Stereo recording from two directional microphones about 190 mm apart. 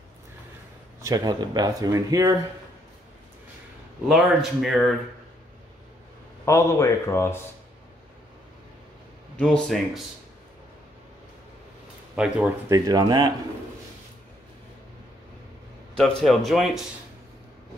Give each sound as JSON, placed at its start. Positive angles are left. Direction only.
{"t": 1.0, "sound": "speech", "side_deg": -20}
{"t": 4.1, "sound": "speech", "side_deg": 0}
{"t": 6.4, "sound": "speech", "side_deg": 15}
{"t": 9.4, "sound": "speech", "side_deg": 5}
{"t": 12.2, "sound": "speech", "side_deg": -5}
{"t": 12.7, "sound": "speech", "side_deg": -20}
{"t": 16.0, "sound": "speech", "side_deg": 5}